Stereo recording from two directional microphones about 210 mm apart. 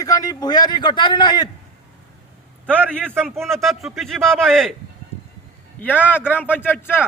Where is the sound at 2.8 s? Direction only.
10° right (ahead or behind).